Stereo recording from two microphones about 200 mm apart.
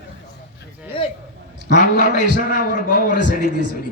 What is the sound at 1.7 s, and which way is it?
A man's voice, 40° left (ahead or behind).